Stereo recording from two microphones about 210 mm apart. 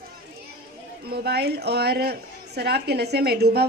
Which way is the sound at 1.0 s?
50° right (ahead or behind).